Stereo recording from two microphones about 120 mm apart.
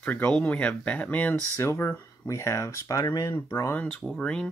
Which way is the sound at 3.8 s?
5° left (ahead or behind).